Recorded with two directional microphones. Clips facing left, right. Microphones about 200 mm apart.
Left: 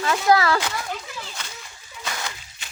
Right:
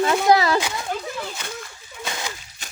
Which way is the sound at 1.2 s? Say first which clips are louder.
Right 6 dB; 55° right (ahead or behind).